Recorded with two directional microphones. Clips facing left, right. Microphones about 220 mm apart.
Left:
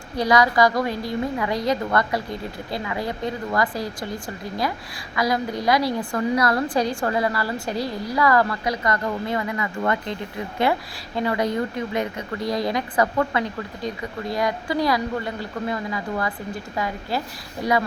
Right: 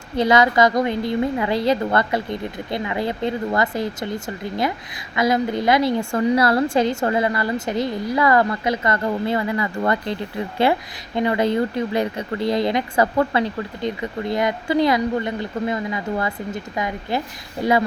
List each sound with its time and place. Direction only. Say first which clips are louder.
0.2 s a woman's voice: right 2 dB; 25° right (ahead or behind)
10.6 s a woman's voice: right 3 dB; 25° right (ahead or behind)